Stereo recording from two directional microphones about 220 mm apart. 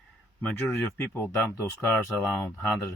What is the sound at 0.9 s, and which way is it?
Speech, 10° left (ahead or behind).